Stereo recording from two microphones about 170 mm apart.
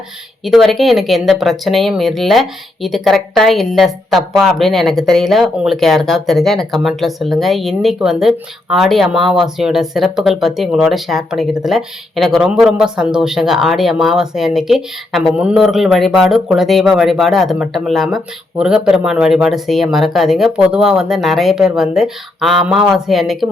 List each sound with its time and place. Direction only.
0.4 s speech: centre (ahead or behind)